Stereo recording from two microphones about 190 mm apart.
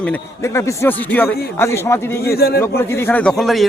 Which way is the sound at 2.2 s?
55° left (ahead or behind).